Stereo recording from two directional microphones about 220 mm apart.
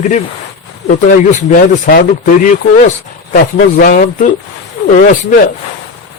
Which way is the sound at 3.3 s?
40° left (ahead or behind).